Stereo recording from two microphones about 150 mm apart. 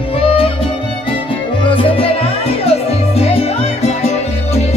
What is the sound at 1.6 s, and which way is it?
Music, 35° left (ahead or behind).